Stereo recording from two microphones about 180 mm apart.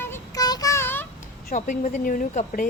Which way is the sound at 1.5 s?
50° left (ahead or behind).